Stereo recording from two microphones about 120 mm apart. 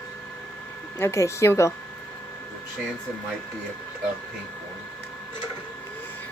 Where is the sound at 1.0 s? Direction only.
25° left (ahead or behind).